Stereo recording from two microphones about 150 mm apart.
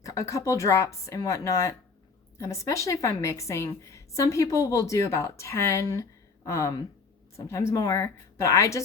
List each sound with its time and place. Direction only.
0.0 s a woman's voice: 20° left (ahead or behind)